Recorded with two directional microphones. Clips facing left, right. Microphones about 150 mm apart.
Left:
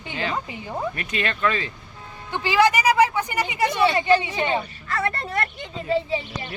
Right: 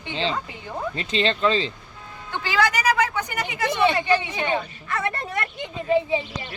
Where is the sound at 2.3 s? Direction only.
20° left (ahead or behind).